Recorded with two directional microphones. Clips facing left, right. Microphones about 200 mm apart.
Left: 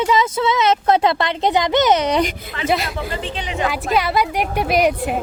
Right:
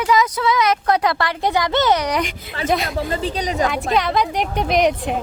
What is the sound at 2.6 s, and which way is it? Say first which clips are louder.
Speech: even; 5° left (ahead or behind).